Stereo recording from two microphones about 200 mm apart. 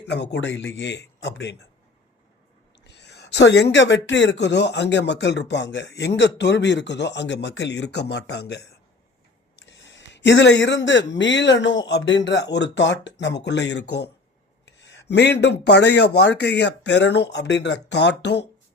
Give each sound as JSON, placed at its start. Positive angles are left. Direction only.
{"t": 0.0, "sound": "speech", "side_deg": 60}
{"t": 2.8, "sound": "speech", "side_deg": 60}